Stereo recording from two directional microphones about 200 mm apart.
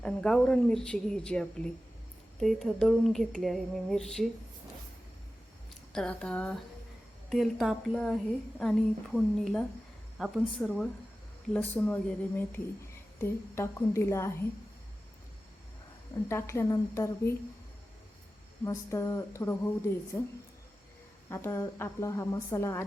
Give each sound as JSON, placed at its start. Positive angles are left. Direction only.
{"t": 0.0, "sound": "speech", "side_deg": 5}
{"t": 5.9, "sound": "a woman's voice", "side_deg": 5}
{"t": 16.1, "sound": "a woman's voice", "side_deg": 15}
{"t": 18.6, "sound": "a woman's voice", "side_deg": 15}